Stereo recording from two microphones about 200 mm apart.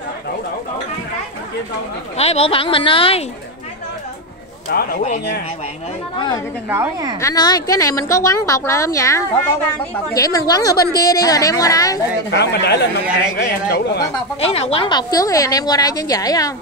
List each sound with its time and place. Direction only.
2.1 s a woman's voice: 30° left (ahead or behind)
4.6 s a man's voice: 50° left (ahead or behind)
6.1 s a woman's voice: 20° left (ahead or behind)
6.7 s a woman's voice: 15° right (ahead or behind)
7.2 s speech: 15° left (ahead or behind)
12.3 s a man's voice: 60° left (ahead or behind)
14.4 s a woman's voice: 30° left (ahead or behind)